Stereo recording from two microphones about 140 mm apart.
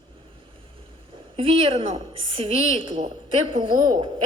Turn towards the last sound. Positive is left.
turn(degrees=-35)  # may be behind; listen again after turning